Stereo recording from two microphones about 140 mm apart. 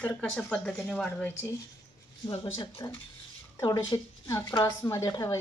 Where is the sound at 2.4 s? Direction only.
25° left (ahead or behind).